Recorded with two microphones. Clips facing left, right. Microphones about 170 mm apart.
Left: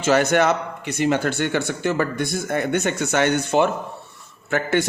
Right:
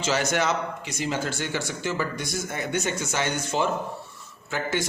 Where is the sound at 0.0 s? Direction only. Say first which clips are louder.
Left 7 dB; 55° left (ahead or behind).